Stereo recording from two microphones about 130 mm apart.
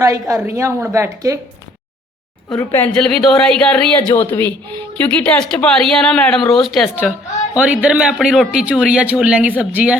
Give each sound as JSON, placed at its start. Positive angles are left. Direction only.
{"t": 0.0, "sound": "a woman's voice", "side_deg": -25}
{"t": 2.7, "sound": "a woman's voice", "side_deg": 10}